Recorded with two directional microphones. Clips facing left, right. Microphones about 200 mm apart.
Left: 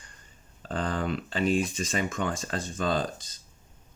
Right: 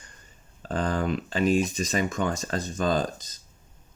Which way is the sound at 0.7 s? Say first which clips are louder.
Right 3 dB; 45° right (ahead or behind).